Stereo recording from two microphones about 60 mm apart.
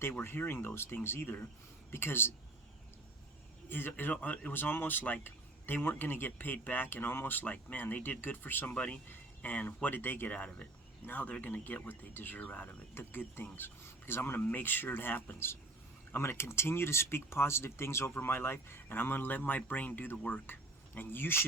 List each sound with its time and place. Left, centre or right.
0.3 s speech: left
3.7 s speech: left
8.7 s speech: left
12.9 s speech: left